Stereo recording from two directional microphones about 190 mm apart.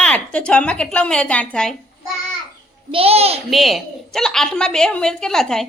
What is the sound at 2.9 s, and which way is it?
Speech, 30° right (ahead or behind).